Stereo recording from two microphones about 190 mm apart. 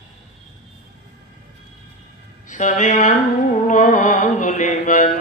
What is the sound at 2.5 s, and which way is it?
Speech, 40° left (ahead or behind).